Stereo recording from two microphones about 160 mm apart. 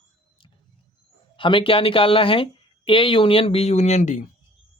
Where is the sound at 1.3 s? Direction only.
30° left (ahead or behind); by 4.2 s 50° left (ahead or behind).